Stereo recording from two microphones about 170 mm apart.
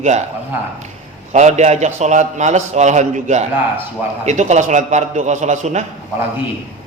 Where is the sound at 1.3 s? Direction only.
45° right (ahead or behind).